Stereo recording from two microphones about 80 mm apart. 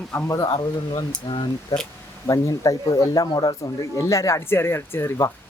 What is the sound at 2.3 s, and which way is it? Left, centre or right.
Speech, left.